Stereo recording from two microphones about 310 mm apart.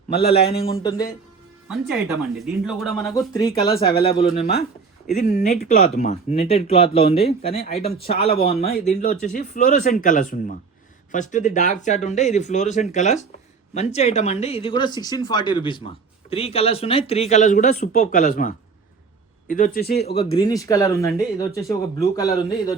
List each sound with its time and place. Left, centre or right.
0.1 s a man's voice: left
0.6 s speech: centre
2.4 s speech: centre
3.1 s speech: centre
3.8 s speech: left
7.5 s speech: left
20.1 s speech: centre